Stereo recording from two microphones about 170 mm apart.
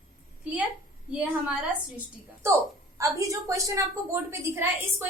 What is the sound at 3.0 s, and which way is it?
A woman's voice, 20° right (ahead or behind).